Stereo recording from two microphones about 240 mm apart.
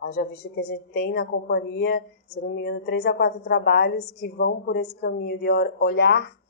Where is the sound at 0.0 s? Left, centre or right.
Left.